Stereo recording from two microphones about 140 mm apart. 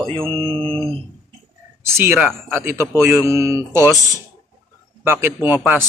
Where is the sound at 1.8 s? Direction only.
15° right (ahead or behind).